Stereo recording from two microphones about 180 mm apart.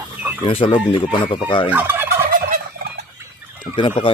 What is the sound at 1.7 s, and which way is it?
Fowl, 10° right (ahead or behind).